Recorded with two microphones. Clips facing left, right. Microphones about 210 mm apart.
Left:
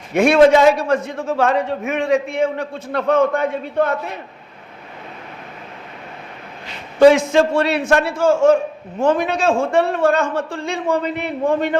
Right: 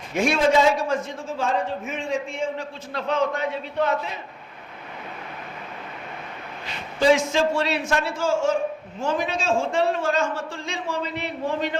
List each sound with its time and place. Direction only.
0.1 s a man's voice: 60° left (ahead or behind)
7.0 s a man's voice: 60° left (ahead or behind)